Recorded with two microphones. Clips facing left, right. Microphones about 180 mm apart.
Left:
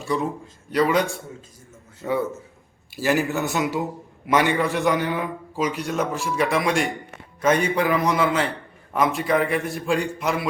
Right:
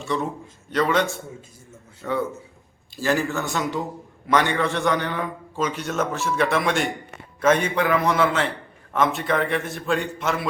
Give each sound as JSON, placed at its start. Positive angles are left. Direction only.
{"t": 0.0, "sound": "a man's voice", "side_deg": 0}
{"t": 2.0, "sound": "a man's voice", "side_deg": 15}